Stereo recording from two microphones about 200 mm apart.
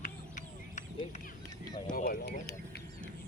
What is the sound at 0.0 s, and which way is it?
Vehicle, 40° left (ahead or behind).